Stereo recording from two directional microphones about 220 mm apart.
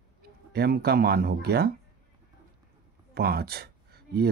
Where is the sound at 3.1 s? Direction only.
45° right (ahead or behind).